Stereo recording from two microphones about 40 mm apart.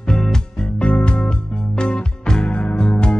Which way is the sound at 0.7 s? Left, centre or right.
Left.